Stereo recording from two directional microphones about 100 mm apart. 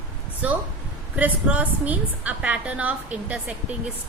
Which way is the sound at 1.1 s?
15° right (ahead or behind).